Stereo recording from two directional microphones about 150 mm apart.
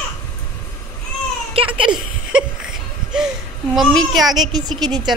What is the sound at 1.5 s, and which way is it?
Giggle, 40° right (ahead or behind).